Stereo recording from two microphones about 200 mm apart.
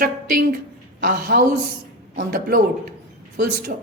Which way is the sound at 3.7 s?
50° right (ahead or behind).